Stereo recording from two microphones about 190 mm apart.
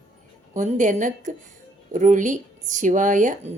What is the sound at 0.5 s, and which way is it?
Speech, 40° right (ahead or behind).